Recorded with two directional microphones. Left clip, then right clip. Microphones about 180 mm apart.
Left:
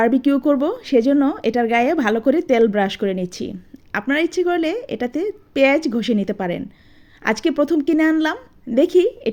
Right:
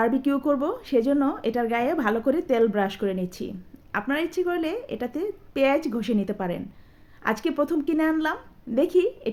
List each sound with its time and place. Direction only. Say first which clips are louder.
0.0 s speech: left 7 dB; 30° left (ahead or behind)